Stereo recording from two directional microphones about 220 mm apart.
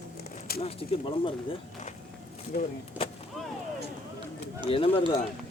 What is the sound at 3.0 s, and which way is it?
Artillery fire, 25° left (ahead or behind).